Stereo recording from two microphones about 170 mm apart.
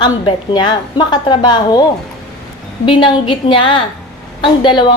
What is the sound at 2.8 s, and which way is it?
A woman's voice, 30° left (ahead or behind).